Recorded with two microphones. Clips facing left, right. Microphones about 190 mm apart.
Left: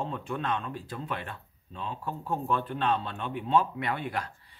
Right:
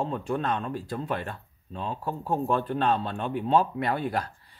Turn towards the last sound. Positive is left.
turn(degrees=-35)  # may be behind; listen again after turning